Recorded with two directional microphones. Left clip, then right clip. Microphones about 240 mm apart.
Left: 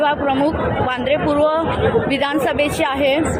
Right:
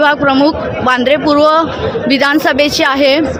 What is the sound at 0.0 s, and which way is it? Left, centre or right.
Speech, right.